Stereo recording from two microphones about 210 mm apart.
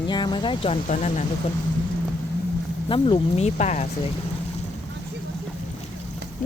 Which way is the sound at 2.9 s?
25° left (ahead or behind).